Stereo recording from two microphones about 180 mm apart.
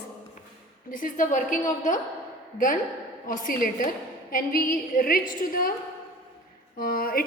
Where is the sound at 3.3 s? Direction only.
50° left (ahead or behind).